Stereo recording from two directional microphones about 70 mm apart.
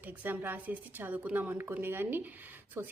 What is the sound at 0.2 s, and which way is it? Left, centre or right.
A woman's voice, right.